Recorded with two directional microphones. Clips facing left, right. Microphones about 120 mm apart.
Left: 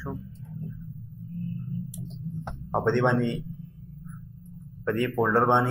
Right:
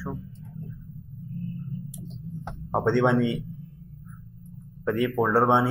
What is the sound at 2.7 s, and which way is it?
Speech, 5° right (ahead or behind).